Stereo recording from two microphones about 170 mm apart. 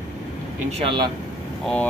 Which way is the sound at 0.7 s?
30° right (ahead or behind).